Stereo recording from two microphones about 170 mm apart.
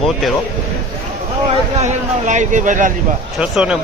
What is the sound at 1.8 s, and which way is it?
Speech, 45° right (ahead or behind).